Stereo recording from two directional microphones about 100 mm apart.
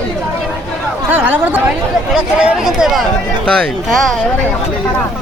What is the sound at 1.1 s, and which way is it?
Speech, 15° right (ahead or behind).